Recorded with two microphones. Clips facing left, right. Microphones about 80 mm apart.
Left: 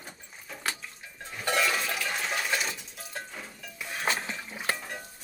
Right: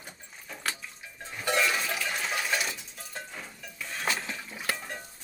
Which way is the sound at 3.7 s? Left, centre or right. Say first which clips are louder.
Left 2 dB; centre.